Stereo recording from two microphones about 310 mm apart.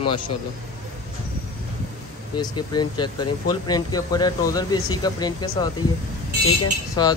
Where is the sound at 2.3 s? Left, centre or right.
Centre.